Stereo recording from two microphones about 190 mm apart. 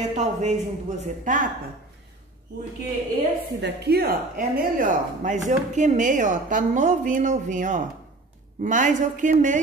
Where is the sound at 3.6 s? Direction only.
60° right (ahead or behind); by 9.6 s 40° right (ahead or behind).